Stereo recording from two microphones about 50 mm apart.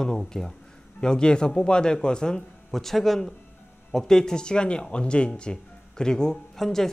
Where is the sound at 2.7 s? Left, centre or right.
Centre.